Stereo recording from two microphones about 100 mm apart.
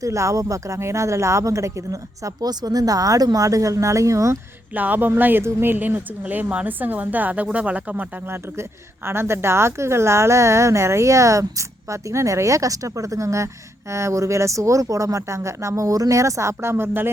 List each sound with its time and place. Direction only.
0.0 s speech: 30° right (ahead or behind)
4.7 s speech: 15° right (ahead or behind)
9.0 s a woman's voice: 25° right (ahead or behind)